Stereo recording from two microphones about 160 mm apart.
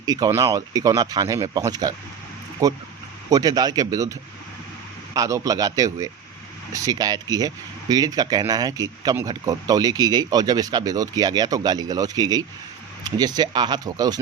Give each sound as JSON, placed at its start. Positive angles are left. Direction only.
{"t": 0.0, "sound": "speech", "side_deg": -25}
{"t": 5.1, "sound": "speech", "side_deg": -20}